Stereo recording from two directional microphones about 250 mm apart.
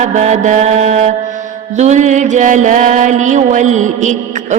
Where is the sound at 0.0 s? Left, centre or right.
Right.